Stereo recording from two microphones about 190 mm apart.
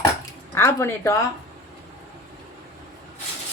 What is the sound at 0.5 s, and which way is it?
Speech, 15° left (ahead or behind).